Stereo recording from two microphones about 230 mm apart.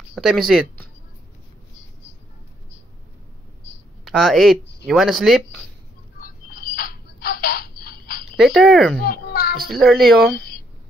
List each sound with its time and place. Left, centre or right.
0.1 s speech: centre
4.0 s speech: centre
6.1 s a sound: left
8.4 s speech: centre
9.0 s a sound: left
9.7 s speech: centre